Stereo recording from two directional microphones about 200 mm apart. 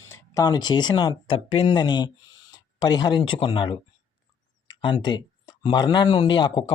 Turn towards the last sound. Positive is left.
turn(degrees=25)  # may be behind; listen again after turning